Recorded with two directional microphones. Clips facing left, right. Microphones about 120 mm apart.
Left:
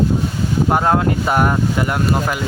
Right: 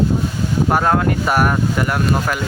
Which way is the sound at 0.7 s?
20° left (ahead or behind).